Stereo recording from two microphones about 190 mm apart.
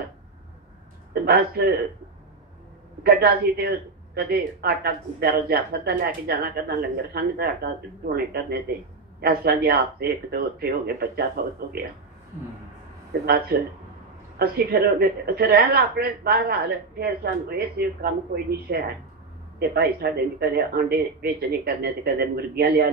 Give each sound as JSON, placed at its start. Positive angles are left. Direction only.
{"t": 1.2, "sound": "speech", "side_deg": -55}
{"t": 3.0, "sound": "speech", "side_deg": -55}
{"t": 13.2, "sound": "speech", "side_deg": -55}